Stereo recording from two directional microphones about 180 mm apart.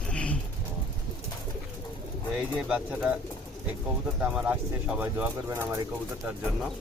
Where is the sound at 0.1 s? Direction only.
5° left (ahead or behind).